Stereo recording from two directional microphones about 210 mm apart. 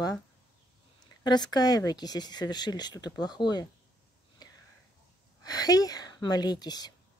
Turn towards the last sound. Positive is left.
turn(degrees=20)  # may be behind; listen again after turning